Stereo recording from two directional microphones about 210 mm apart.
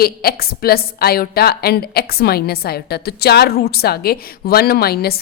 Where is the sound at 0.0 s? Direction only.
45° left (ahead or behind).